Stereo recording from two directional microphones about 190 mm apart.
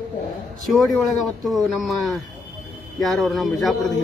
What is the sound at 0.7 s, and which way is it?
Speech, centre (ahead or behind).